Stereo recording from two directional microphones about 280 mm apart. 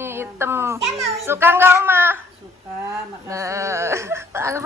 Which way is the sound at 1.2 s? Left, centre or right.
Centre.